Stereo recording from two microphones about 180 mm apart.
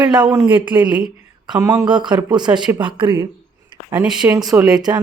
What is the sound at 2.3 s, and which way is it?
Speech, 25° right (ahead or behind).